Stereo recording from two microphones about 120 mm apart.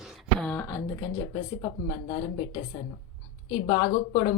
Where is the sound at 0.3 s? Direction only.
10° left (ahead or behind).